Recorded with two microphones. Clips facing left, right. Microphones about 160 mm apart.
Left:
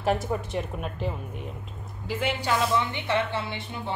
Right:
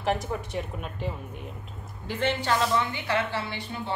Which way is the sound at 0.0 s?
Centre (ahead or behind).